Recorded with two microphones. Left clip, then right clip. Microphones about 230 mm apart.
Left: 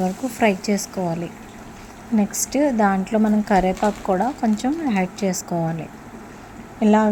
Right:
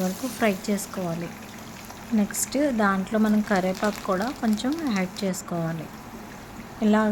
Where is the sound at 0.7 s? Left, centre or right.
Centre.